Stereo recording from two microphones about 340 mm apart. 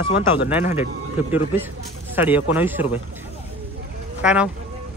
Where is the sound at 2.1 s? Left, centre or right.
Centre.